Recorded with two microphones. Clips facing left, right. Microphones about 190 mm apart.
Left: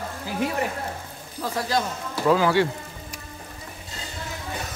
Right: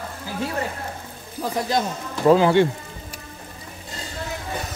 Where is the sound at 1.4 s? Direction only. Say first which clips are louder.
Right 2 dB; 15° right (ahead or behind).